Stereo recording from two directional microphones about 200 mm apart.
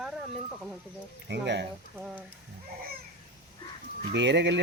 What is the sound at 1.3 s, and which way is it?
Speech, 60° right (ahead or behind).